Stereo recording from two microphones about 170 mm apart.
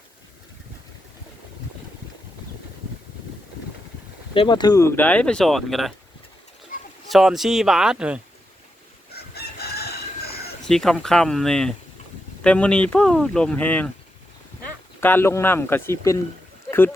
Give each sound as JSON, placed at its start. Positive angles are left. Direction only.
{"t": 4.4, "sound": "speech", "side_deg": 25}
{"t": 7.1, "sound": "speech", "side_deg": 0}
{"t": 9.1, "sound": "chicken", "side_deg": 70}
{"t": 10.7, "sound": "speech", "side_deg": 0}
{"t": 15.0, "sound": "speech", "side_deg": 15}